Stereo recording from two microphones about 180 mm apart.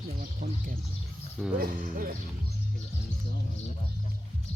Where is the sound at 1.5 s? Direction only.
55° right (ahead or behind).